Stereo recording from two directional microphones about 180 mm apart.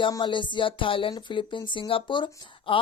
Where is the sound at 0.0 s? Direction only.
25° left (ahead or behind).